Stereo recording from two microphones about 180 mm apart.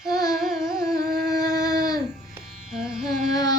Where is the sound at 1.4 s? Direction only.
20° left (ahead or behind).